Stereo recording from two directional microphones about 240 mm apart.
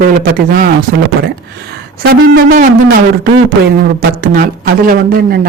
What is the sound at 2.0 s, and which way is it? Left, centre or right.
Speech, right.